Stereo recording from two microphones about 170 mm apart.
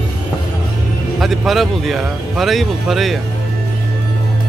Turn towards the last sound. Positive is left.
turn(degrees=0)  # may be behind; listen again after turning